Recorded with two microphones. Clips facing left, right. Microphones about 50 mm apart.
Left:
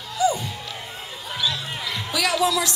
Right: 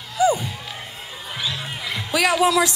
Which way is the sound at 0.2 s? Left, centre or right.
Right.